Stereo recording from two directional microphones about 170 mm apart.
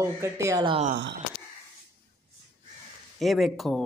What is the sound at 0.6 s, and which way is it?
Speech, 30° right (ahead or behind).